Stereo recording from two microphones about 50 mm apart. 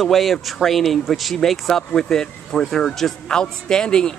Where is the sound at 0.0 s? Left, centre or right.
Centre.